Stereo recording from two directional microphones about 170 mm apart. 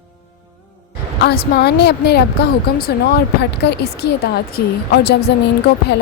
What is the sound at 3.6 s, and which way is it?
Speech, 80° left.